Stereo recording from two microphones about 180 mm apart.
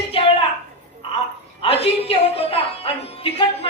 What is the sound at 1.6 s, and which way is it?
A woman's voice, 30° left (ahead or behind).